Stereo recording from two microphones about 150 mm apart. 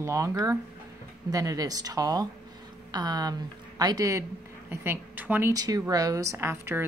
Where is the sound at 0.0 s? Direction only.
20° right (ahead or behind).